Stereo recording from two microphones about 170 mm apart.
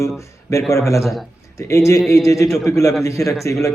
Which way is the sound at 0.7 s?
20° left (ahead or behind).